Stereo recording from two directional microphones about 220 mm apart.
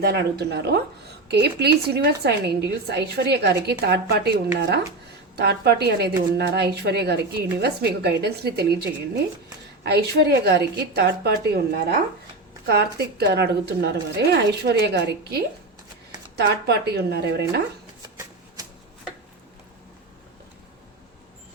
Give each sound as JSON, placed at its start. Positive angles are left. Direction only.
{"t": 0.0, "sound": "a woman's voice", "side_deg": -45}
{"t": 9.8, "sound": "a woman's voice", "side_deg": -50}